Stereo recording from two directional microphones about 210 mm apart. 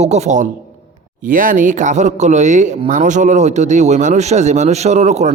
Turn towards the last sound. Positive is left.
turn(degrees=-35)  # may be behind; listen again after turning